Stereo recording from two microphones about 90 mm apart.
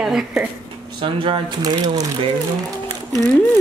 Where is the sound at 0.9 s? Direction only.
65° right (ahead or behind).